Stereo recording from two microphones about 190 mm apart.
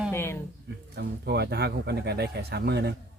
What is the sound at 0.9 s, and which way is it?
Speech, 60° right (ahead or behind).